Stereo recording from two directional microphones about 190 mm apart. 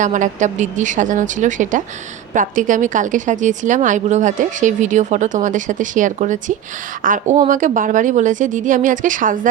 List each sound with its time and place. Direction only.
0.0 s a woman's voice: 40° right (ahead or behind)